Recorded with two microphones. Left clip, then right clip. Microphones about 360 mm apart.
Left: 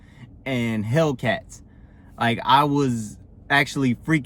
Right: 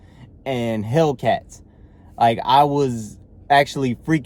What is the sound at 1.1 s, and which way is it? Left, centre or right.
Speech, right.